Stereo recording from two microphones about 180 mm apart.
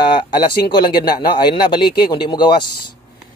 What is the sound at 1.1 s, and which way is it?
Speech, 25° left (ahead or behind).